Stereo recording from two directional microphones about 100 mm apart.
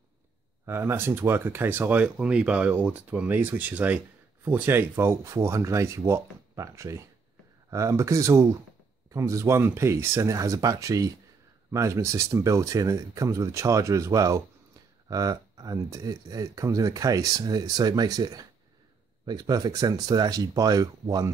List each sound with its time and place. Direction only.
0.7 s speech: 25° right (ahead or behind)